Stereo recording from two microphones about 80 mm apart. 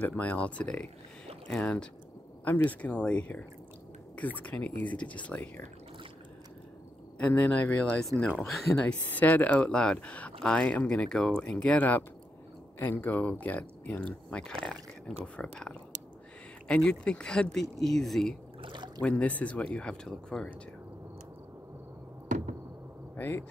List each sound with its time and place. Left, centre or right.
0.0 s speech: centre
2.4 s speech: left
7.2 s speech: centre
8.5 s speech: centre
8.8 s speech: centre
18.6 s a sound: right
19.0 s speech: centre
23.1 s speech: left